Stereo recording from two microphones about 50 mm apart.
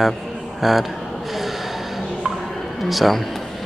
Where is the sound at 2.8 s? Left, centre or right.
Centre.